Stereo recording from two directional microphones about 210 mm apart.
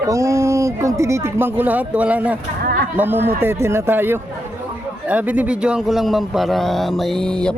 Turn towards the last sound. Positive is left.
turn(degrees=5)  # may be behind; listen again after turning